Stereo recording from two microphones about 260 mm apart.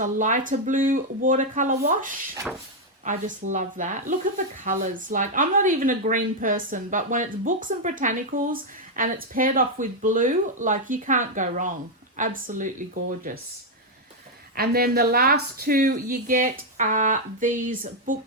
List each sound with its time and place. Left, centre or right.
0.0 s speech: right
14.5 s speech: right